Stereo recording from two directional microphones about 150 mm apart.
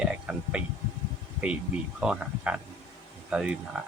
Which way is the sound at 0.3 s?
5° right (ahead or behind).